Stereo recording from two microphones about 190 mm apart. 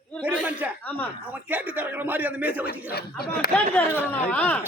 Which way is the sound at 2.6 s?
55° left (ahead or behind).